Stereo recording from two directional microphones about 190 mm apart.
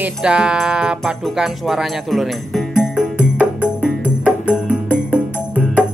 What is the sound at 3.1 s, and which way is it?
Music, 10° left (ahead or behind).